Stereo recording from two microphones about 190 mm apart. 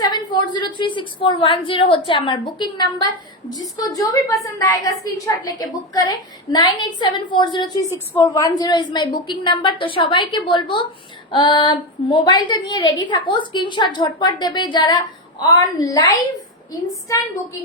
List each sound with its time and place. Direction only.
0.0 s a woman's voice: 20° left (ahead or behind)